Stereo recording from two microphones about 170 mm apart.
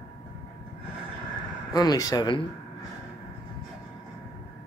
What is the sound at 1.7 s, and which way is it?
Speech, 20° left (ahead or behind).